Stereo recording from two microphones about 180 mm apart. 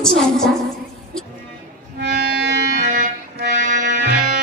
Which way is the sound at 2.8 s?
45° right (ahead or behind).